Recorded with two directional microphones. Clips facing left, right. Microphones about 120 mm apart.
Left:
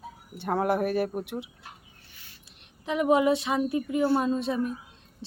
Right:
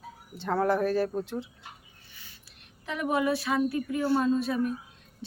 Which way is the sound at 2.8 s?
20° left (ahead or behind).